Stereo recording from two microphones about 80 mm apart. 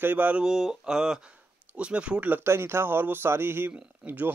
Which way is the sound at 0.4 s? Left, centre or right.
Centre.